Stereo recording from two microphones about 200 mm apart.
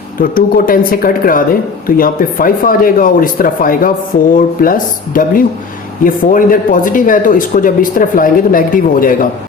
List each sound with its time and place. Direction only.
0.2 s speech: 45° left (ahead or behind)